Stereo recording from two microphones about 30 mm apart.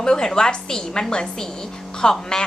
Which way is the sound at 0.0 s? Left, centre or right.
Left.